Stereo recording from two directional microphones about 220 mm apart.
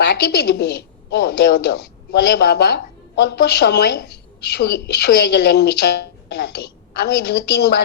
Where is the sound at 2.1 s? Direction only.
50° left (ahead or behind).